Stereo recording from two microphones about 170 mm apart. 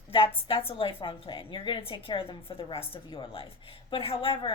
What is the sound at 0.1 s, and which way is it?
A woman's voice, 30° left (ahead or behind).